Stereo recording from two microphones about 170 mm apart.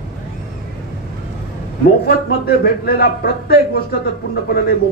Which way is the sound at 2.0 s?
65° left (ahead or behind).